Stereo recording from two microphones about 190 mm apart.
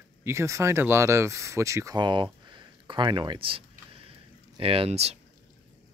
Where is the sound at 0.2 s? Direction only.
15° right (ahead or behind); by 5.1 s 30° right (ahead or behind).